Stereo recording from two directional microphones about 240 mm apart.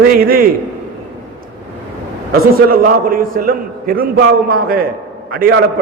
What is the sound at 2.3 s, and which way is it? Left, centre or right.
A man's voice, right.